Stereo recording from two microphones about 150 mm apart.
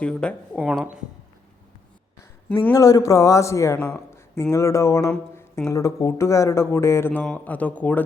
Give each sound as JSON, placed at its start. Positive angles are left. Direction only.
{"t": 0.0, "sound": "speech", "side_deg": 5}
{"t": 0.6, "sound": "speech", "side_deg": -5}
{"t": 2.7, "sound": "a man's voice", "side_deg": 25}
{"t": 3.8, "sound": "a sound", "side_deg": 10}
{"t": 4.5, "sound": "a man's voice", "side_deg": 20}